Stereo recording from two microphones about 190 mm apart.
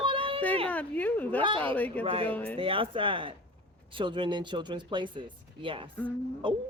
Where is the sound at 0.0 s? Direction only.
25° right (ahead or behind).